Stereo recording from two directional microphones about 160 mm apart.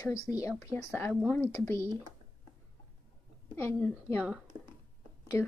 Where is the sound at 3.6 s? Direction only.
10° left (ahead or behind).